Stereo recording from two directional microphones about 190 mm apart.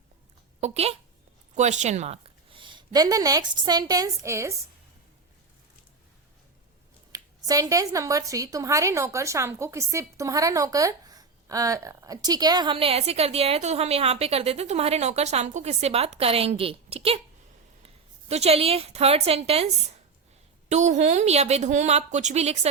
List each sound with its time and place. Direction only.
0.6 s a woman's voice: 35° right (ahead or behind); by 4.5 s 15° right (ahead or behind)
7.1 s a woman's voice: 20° right (ahead or behind); by 22.7 s 35° right (ahead or behind)